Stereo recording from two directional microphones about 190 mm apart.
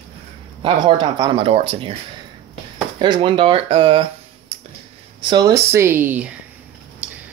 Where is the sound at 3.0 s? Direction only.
25° right (ahead or behind).